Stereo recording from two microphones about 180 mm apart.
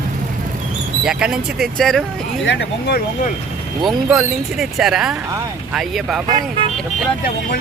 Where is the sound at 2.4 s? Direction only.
75° left (ahead or behind).